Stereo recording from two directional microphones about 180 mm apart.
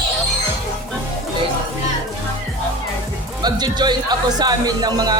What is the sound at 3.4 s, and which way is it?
Speech, 25° right (ahead or behind).